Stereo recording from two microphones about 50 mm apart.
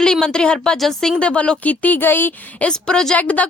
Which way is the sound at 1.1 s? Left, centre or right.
Left.